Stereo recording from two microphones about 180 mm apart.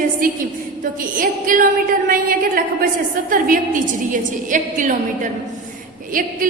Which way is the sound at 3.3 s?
50° right (ahead or behind).